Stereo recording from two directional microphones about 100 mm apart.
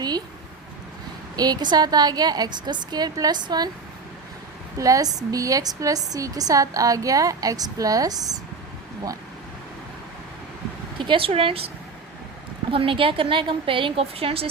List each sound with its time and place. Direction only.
1.4 s a woman's voice: 40° right (ahead or behind)
4.8 s a woman's voice: 35° right (ahead or behind)
10.9 s speech: 55° right (ahead or behind)
12.7 s a woman's voice: 65° right (ahead or behind)